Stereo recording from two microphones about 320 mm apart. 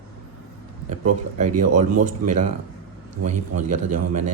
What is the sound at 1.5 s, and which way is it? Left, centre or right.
Speech, right.